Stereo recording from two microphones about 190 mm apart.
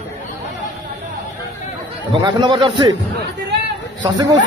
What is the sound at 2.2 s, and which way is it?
Speech, 25° right (ahead or behind).